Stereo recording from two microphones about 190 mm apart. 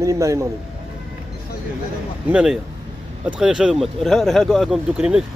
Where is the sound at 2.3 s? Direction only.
5° right (ahead or behind).